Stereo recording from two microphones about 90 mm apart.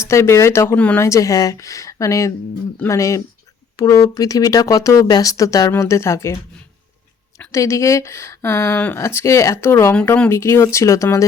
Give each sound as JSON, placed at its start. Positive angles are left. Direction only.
{"t": 0.0, "sound": "speech", "side_deg": 30}
{"t": 7.3, "sound": "speech", "side_deg": 35}